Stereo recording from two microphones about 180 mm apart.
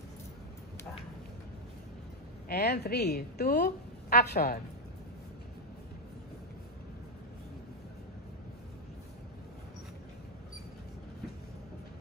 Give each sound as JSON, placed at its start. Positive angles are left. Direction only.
{"t": 2.4, "sound": "a woman's voice", "side_deg": 65}